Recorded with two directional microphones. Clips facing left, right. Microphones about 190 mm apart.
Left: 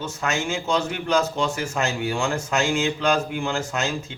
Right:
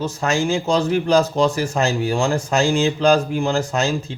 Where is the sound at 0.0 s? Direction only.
35° right (ahead or behind).